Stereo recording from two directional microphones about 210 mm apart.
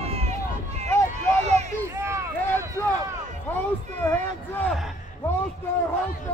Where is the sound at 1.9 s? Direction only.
15° right (ahead or behind).